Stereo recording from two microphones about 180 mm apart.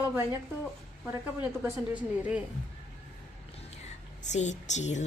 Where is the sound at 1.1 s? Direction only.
10° right (ahead or behind).